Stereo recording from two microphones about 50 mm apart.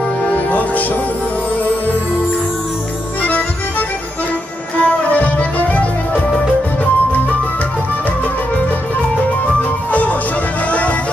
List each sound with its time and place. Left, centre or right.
0.2 s music: left
4.7 s music: left